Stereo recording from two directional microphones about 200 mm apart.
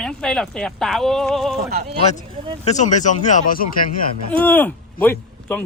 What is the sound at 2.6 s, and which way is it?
Speech, 35° left (ahead or behind).